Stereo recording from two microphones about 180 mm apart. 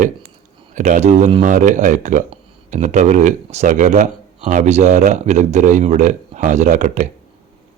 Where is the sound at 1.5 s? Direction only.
45° right (ahead or behind).